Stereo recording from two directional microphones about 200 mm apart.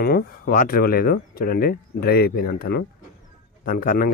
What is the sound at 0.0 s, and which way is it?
Speech, 50° left (ahead or behind).